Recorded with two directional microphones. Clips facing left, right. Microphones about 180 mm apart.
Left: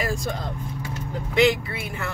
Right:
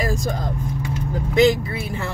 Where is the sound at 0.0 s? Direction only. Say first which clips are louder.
Right 3 dB; 40° right (ahead or behind).